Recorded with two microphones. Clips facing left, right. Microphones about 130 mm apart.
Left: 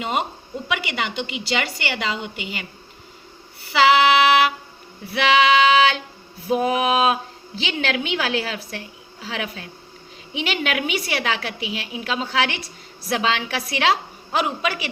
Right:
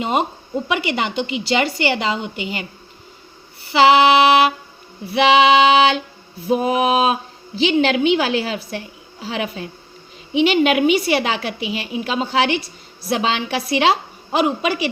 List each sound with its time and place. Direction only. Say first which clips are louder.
0.0 s a woman's voice: right 5 dB; 35° right (ahead or behind)
3.7 s a woman's voice: right 3 dB; 35° right (ahead or behind)